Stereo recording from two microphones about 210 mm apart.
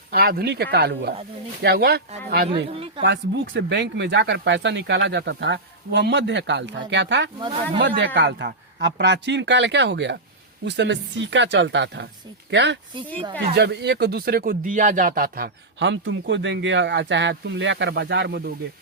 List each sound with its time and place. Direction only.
0.1 s speech: 45° right (ahead or behind)
7.3 s speech: 20° right (ahead or behind)
7.8 s speech: 55° right (ahead or behind); by 15.4 s 40° right (ahead or behind)
15.8 s speech: 60° right (ahead or behind)